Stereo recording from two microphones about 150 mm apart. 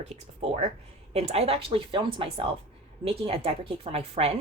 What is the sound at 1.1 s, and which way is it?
Speech, 45° right (ahead or behind).